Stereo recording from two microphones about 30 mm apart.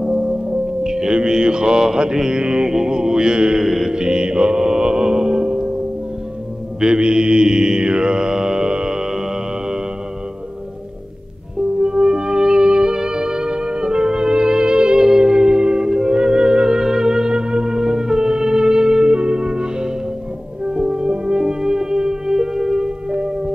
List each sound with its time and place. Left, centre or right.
0.0 s mantra: right
3.5 s music: centre
4.0 s music: right
6.8 s mantra: right
11.8 s music: right